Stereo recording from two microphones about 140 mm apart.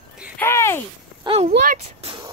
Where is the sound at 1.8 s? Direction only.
45° right (ahead or behind).